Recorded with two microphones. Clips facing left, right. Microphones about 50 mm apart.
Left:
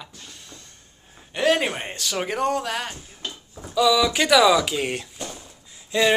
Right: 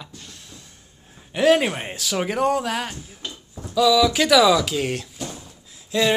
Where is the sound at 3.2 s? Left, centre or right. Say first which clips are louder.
Left 1 dB; centre.